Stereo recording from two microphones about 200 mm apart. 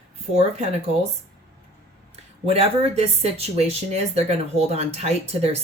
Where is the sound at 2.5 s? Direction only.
30° right (ahead or behind).